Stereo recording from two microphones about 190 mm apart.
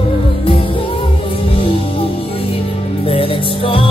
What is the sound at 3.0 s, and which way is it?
Music, 30° left (ahead or behind).